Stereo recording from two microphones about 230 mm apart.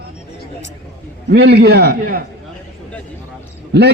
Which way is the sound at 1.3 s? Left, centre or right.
Right.